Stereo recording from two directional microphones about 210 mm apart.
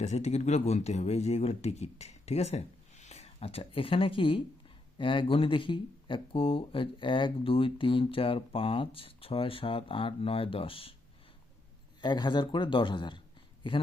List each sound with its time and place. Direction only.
0.0 s speech: 30° left (ahead or behind)
11.9 s speech: 20° left (ahead or behind)